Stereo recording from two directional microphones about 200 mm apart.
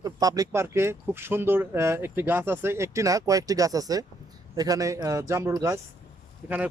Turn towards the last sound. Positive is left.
turn(degrees=-10)  # may be behind; listen again after turning